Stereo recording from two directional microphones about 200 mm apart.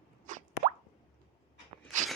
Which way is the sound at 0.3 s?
40° right (ahead or behind).